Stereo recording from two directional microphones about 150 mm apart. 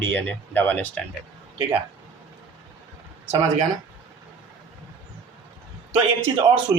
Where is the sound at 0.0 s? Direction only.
15° left (ahead or behind).